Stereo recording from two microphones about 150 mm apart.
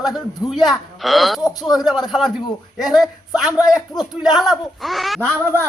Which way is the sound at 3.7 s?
Centre (ahead or behind).